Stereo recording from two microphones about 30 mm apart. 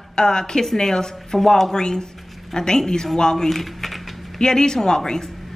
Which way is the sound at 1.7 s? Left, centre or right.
Left.